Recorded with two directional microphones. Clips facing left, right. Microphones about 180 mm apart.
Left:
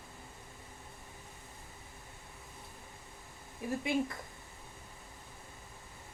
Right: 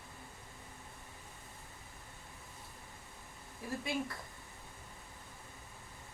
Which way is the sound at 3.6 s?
20° left (ahead or behind).